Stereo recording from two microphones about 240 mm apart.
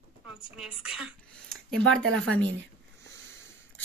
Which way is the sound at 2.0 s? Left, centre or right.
Right.